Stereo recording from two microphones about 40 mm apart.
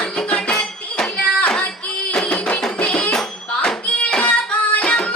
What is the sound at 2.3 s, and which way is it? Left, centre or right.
Music, left.